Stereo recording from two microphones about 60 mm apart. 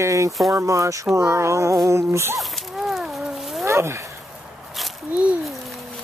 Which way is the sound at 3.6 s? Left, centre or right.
Right.